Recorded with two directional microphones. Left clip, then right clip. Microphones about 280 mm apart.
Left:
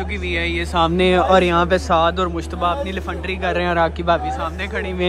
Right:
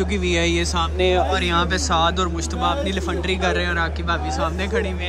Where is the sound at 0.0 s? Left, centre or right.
Centre.